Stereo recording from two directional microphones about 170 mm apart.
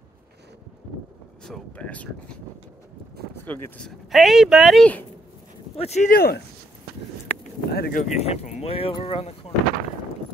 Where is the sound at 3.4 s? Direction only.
10° left (ahead or behind).